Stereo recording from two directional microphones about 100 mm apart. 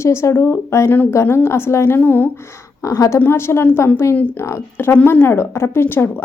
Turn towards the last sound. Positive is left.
turn(degrees=25)  # may be behind; listen again after turning